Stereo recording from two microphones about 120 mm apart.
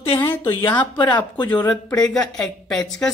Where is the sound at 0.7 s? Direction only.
40° left (ahead or behind).